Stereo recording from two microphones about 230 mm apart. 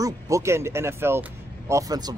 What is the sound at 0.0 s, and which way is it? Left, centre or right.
Speech, centre.